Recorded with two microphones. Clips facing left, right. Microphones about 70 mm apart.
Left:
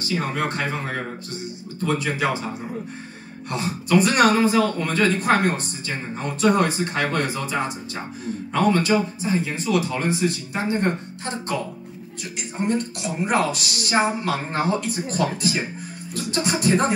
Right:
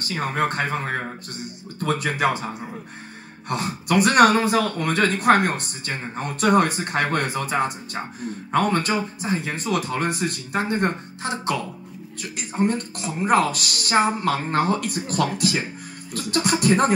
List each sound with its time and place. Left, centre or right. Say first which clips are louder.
0.0 s speech: right 1 dB; right